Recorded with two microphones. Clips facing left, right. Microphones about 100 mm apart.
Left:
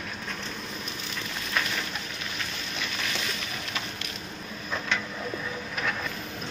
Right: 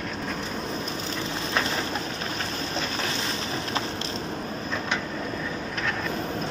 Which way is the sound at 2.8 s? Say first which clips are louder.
Right 3 dB; 35° right (ahead or behind).